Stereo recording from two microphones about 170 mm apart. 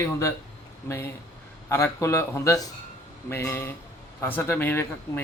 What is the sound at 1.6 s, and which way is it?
Speech, 15° left (ahead or behind).